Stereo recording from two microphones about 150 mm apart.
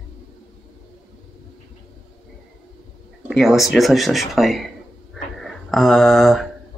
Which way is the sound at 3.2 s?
5° right (ahead or behind).